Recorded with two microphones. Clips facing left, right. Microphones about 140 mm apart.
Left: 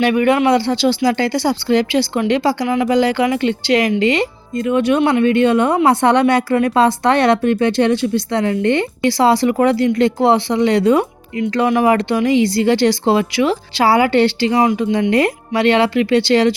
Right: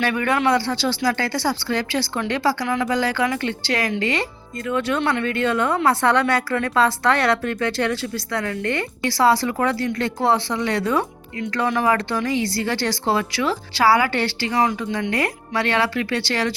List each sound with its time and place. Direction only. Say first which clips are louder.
0.0 s speech: left 7 dB; 20° left (ahead or behind)